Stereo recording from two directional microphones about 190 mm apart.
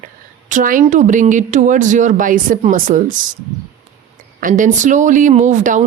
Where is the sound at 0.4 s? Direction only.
45° right (ahead or behind).